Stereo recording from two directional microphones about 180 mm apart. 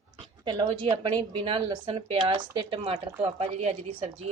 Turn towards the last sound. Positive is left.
turn(degrees=-35)  # may be behind; listen again after turning